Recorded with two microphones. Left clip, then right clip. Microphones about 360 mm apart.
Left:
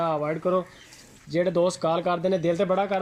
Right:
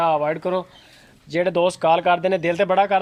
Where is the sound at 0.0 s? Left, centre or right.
Right.